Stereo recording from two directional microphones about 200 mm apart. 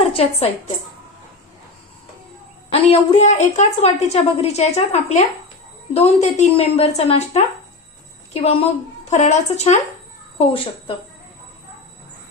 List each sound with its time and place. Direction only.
0.2 s a woman's voice: 30° left (ahead or behind)
2.7 s a woman's voice: 30° left (ahead or behind)